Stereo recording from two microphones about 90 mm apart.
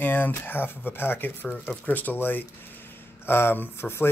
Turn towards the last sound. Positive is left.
turn(degrees=25)  # may be behind; listen again after turning